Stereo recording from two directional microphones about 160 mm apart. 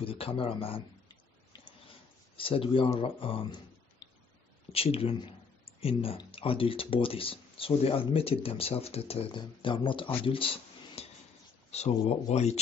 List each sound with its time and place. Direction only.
0.0 s speech: 35° left (ahead or behind)
2.3 s speech: 35° left (ahead or behind)
4.7 s speech: 35° left (ahead or behind)
11.0 s a sound: 40° left (ahead or behind)
11.7 s speech: 40° left (ahead or behind)